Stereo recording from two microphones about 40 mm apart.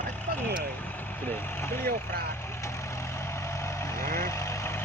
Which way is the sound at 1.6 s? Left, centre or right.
Left.